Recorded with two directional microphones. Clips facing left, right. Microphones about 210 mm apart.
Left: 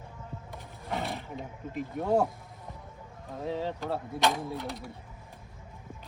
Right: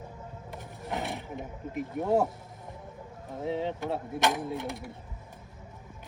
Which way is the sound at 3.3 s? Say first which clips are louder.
Right 2 dB; 20° right (ahead or behind).